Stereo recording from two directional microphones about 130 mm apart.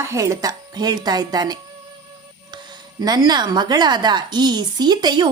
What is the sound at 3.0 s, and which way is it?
A woman's voice, 30° right (ahead or behind).